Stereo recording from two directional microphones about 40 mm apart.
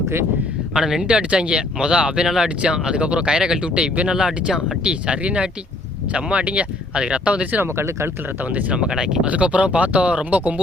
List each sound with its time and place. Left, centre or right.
0.7 s speech: centre
7.6 s speech: right
8.7 s speech: right
9.2 s speech: right